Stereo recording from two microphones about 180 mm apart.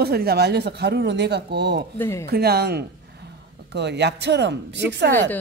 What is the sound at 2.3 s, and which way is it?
A woman's voice, 60° right (ahead or behind).